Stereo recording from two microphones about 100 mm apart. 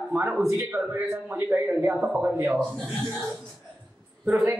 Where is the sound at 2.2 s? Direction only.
20° right (ahead or behind).